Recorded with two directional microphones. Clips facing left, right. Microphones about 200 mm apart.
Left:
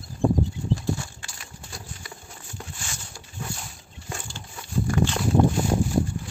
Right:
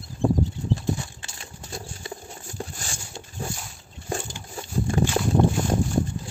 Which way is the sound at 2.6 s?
35° right (ahead or behind).